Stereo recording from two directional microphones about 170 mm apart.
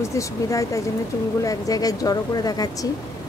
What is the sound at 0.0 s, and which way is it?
Speech, 20° left (ahead or behind).